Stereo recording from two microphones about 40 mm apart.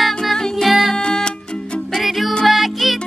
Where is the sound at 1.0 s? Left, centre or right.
Left.